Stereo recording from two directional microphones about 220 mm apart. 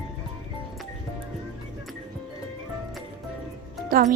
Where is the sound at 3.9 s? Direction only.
40° right (ahead or behind).